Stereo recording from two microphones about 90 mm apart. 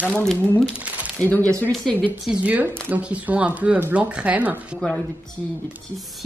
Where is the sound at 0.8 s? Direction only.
15° right (ahead or behind).